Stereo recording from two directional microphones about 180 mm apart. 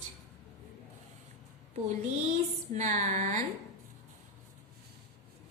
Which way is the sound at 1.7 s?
40° right (ahead or behind).